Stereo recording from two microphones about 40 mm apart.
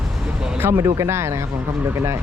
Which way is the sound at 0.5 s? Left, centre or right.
Right.